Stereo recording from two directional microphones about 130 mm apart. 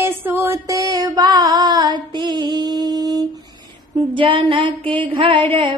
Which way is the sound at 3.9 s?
40° right (ahead or behind).